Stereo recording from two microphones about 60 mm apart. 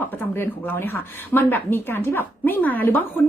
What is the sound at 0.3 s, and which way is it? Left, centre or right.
Speech, left.